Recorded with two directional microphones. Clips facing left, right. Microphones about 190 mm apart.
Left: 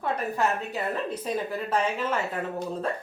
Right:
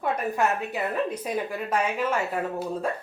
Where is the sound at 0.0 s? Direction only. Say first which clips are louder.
Right 2 dB; 10° right (ahead or behind).